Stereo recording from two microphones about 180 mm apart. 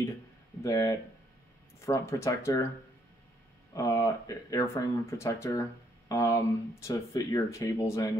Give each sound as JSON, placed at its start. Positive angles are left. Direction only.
{"t": 0.6, "sound": "speech", "side_deg": 20}
{"t": 3.7, "sound": "speech", "side_deg": 20}